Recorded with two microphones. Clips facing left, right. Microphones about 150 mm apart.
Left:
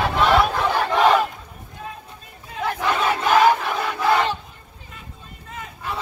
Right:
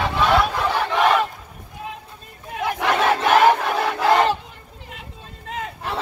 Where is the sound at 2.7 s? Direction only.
60° right (ahead or behind).